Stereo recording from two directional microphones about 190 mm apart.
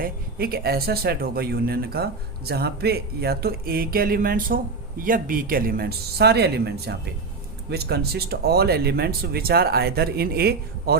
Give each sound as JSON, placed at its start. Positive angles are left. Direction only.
{"t": 0.0, "sound": "speech", "side_deg": -55}